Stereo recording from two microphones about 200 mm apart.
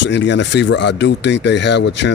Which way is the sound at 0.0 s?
65° left (ahead or behind).